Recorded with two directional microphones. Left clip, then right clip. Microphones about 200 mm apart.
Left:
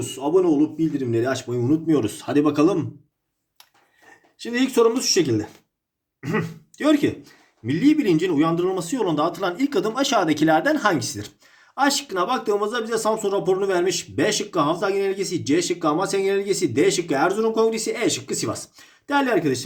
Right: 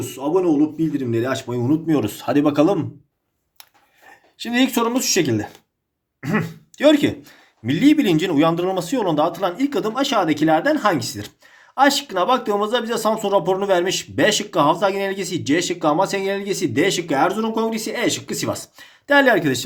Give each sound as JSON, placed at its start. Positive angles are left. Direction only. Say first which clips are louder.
{"t": 0.0, "sound": "speech", "louder": "even", "side_deg": -15}
{"t": 4.4, "sound": "speech", "louder": "even", "side_deg": -35}
{"t": 11.7, "sound": "speech", "louder": "right 5 dB", "side_deg": -20}